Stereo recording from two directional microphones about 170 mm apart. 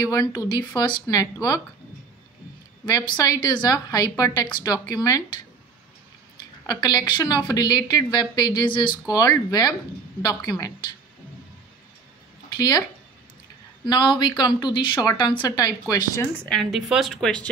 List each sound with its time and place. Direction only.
0.1 s a woman's voice: 20° left (ahead or behind)
2.8 s a woman's voice: 25° left (ahead or behind)
6.6 s a woman's voice: 25° left (ahead or behind)
12.5 s speech: 25° left (ahead or behind)
13.8 s a woman's voice: 25° left (ahead or behind)
16.4 s a woman's voice: centre (ahead or behind)